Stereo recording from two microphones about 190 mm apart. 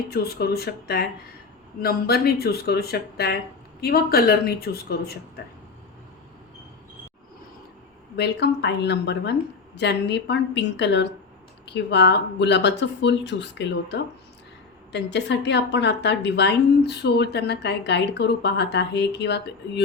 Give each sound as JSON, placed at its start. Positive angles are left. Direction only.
{"t": 0.1, "sound": "a woman's voice", "side_deg": 55}
{"t": 8.1, "sound": "a woman's voice", "side_deg": 60}